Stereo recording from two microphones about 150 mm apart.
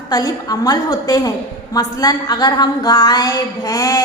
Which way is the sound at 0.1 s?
25° left (ahead or behind).